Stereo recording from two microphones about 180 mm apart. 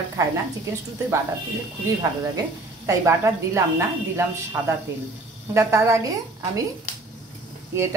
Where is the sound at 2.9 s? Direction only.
15° right (ahead or behind).